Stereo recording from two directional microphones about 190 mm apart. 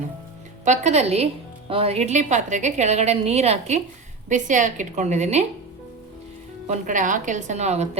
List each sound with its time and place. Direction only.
0.6 s a woman's voice: 35° right (ahead or behind)
6.7 s a woman's voice: 40° right (ahead or behind)